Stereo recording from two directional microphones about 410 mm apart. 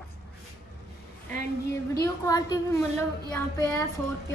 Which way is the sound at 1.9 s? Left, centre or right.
Centre.